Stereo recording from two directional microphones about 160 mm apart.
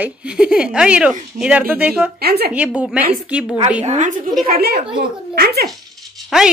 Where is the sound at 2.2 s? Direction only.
75° right (ahead or behind).